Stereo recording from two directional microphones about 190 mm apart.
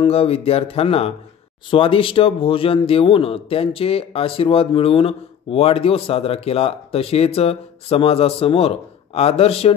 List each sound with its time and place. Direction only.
0.0 s speech: 30° left (ahead or behind)